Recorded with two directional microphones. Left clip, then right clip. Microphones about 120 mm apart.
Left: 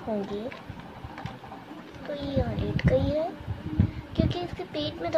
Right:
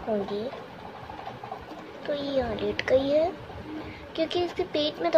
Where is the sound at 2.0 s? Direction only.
5° left (ahead or behind).